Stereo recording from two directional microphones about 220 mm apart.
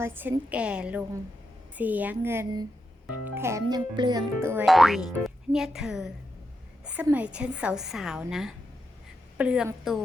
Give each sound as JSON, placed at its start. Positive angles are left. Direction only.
{"t": 0.0, "sound": "speech", "side_deg": -10}
{"t": 4.6, "sound": "a woman's voice", "side_deg": 0}